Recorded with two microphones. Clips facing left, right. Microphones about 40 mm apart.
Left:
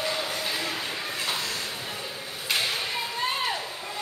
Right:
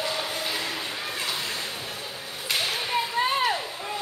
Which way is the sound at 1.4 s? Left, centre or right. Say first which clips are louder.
Even; centre.